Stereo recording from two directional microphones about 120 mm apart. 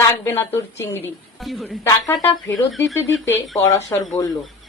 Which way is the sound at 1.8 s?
25° left (ahead or behind).